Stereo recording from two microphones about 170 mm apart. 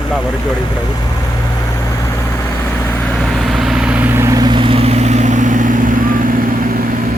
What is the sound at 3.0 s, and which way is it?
Vehicle, centre (ahead or behind).